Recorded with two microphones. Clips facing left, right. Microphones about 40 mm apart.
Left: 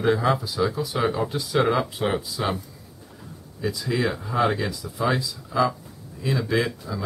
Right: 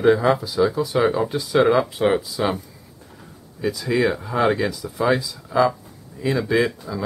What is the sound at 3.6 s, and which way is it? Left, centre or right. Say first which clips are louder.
Speech: right 5 dB; centre.